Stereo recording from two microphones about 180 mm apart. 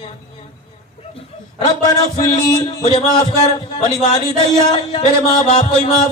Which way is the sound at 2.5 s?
25° left (ahead or behind).